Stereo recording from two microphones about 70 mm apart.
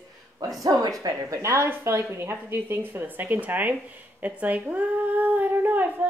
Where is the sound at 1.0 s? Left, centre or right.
Right.